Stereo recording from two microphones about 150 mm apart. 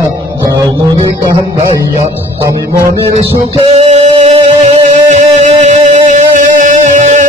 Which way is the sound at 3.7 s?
45° right (ahead or behind).